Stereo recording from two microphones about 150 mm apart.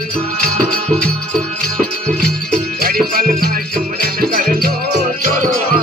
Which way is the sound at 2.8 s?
75° right (ahead or behind).